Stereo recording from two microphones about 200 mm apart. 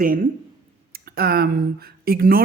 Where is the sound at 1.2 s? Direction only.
50° right (ahead or behind).